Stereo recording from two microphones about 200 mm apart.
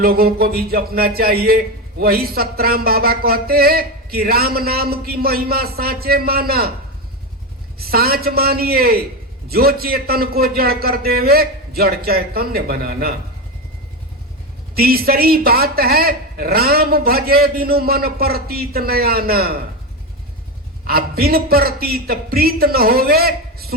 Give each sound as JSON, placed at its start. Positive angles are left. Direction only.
{"t": 0.0, "sound": "speech", "side_deg": -50}
{"t": 7.8, "sound": "speech", "side_deg": -50}
{"t": 14.8, "sound": "speech", "side_deg": -50}
{"t": 20.8, "sound": "speech", "side_deg": -50}